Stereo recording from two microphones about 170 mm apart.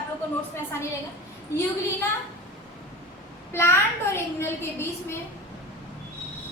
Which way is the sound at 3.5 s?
15° left (ahead or behind).